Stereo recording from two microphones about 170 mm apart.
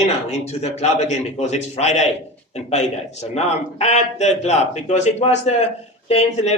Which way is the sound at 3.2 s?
40° left (ahead or behind).